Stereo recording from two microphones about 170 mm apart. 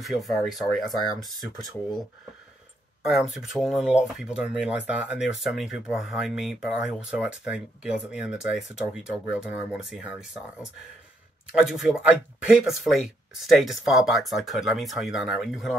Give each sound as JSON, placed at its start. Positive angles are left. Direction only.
{"t": 0.0, "sound": "speech", "side_deg": 0}
{"t": 3.0, "sound": "speech", "side_deg": 0}
{"t": 11.5, "sound": "speech", "side_deg": -5}